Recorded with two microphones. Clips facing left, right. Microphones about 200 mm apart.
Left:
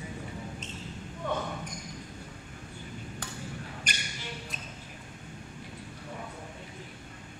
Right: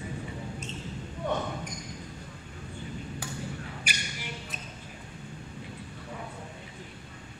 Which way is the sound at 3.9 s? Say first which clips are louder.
Right 2 dB; 5° right (ahead or behind).